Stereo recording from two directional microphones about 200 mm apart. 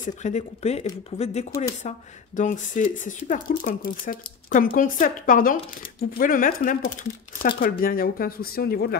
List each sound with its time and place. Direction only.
0.0 s speech: 35° left (ahead or behind)